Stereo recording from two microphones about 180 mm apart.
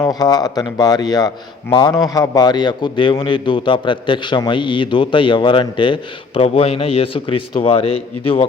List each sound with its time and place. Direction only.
0.0 s a man's voice: 20° left (ahead or behind)